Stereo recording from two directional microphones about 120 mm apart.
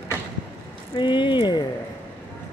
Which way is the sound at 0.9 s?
40° left (ahead or behind).